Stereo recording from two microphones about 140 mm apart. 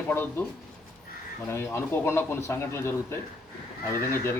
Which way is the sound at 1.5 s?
20° left (ahead or behind).